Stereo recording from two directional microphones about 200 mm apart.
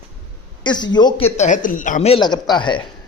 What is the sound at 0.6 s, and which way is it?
Speech, 20° left (ahead or behind).